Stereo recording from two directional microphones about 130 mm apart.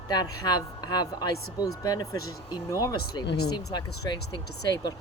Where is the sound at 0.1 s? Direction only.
30° left (ahead or behind).